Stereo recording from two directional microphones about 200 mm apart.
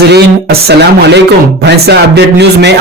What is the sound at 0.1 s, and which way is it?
A man's voice, 55° right (ahead or behind).